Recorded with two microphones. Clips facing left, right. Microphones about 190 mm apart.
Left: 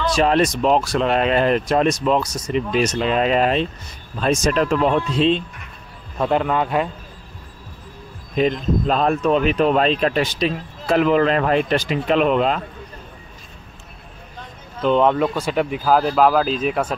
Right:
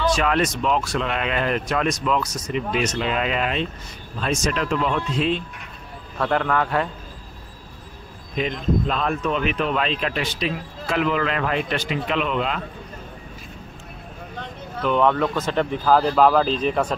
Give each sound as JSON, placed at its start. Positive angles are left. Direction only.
{"t": 0.1, "sound": "speech", "side_deg": 35}
{"t": 6.1, "sound": "speech", "side_deg": 20}
{"t": 8.4, "sound": "speech", "side_deg": 40}
{"t": 14.8, "sound": "speech", "side_deg": 20}